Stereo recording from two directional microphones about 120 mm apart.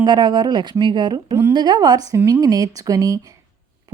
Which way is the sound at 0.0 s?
40° right (ahead or behind).